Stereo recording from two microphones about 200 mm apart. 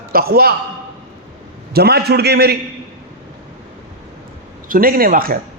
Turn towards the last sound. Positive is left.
turn(degrees=-45)  # may be behind; listen again after turning